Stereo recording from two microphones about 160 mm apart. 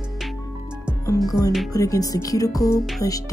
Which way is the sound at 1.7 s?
20° left (ahead or behind).